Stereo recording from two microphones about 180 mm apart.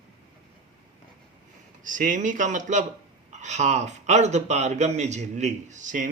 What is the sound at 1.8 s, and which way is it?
A man's voice, 45° right (ahead or behind).